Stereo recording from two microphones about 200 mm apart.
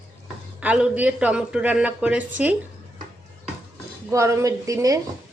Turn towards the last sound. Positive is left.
turn(degrees=-15)  # may be behind; listen again after turning